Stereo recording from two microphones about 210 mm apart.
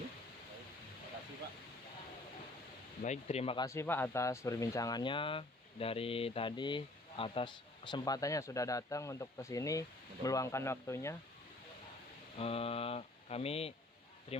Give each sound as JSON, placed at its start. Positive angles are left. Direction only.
{"t": 3.0, "sound": "speech", "side_deg": 30}
{"t": 12.4, "sound": "speech", "side_deg": 30}